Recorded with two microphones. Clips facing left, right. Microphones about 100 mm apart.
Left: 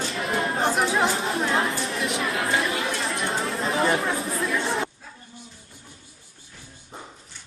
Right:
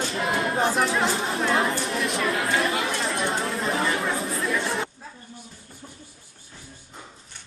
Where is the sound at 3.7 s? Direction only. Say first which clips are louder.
Left 5 dB; 30° left (ahead or behind).